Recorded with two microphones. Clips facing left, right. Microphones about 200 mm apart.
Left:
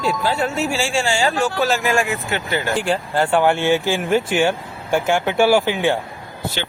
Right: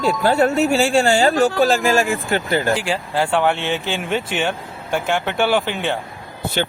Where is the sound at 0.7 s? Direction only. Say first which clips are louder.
Right 6 dB; 60° right (ahead or behind).